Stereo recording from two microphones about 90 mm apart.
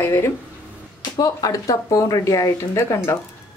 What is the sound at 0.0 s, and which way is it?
Speech, 30° left (ahead or behind).